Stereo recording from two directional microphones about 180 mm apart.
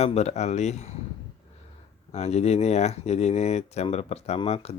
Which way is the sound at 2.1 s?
35° left (ahead or behind).